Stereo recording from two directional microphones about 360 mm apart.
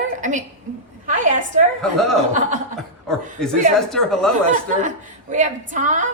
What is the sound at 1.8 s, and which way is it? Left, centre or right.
Speech, centre.